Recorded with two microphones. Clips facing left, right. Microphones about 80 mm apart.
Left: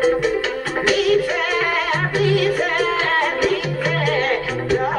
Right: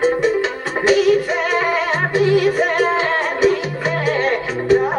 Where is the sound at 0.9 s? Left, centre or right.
Right.